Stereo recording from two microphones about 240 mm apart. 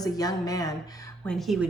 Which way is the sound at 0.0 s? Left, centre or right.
Centre.